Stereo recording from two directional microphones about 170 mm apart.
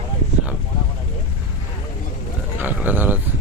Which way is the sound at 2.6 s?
10° right (ahead or behind).